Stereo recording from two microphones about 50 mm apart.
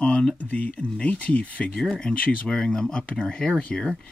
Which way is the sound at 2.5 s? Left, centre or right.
Centre.